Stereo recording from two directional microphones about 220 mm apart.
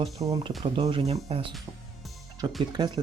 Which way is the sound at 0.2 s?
15° right (ahead or behind).